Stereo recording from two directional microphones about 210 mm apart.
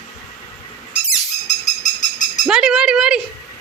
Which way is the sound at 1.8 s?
35° left (ahead or behind).